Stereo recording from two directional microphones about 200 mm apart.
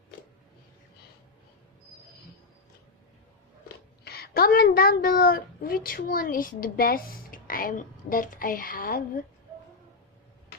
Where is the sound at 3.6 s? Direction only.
50° left (ahead or behind).